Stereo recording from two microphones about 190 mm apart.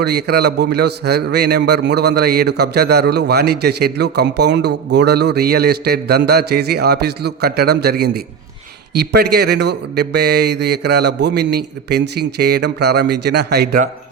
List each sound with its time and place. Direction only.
0.0 s a man's voice: 60° right (ahead or behind)